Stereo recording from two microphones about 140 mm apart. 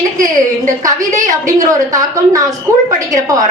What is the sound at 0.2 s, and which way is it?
Speech, 70° right (ahead or behind).